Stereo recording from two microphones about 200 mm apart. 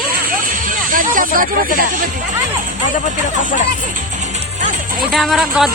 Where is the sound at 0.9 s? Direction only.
45° right (ahead or behind).